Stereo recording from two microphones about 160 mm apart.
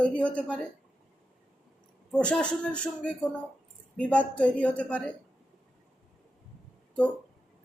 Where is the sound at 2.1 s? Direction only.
5° left (ahead or behind).